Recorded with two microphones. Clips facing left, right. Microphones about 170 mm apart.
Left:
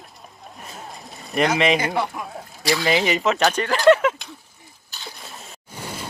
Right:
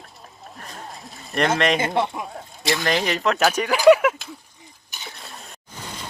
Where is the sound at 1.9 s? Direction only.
25° right (ahead or behind).